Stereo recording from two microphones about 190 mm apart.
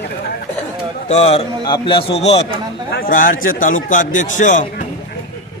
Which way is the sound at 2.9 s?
50° left (ahead or behind).